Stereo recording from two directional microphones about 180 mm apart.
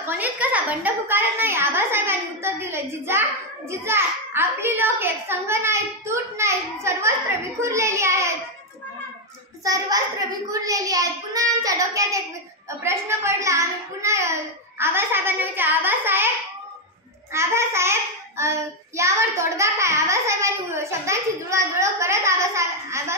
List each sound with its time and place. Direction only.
0.0 s a woman's voice: 10° right (ahead or behind)
9.7 s a child's voice: 20° right (ahead or behind)
17.3 s a child's voice: 15° right (ahead or behind)